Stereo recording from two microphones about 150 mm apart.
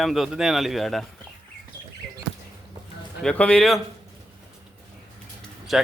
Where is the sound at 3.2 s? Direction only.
10° left (ahead or behind).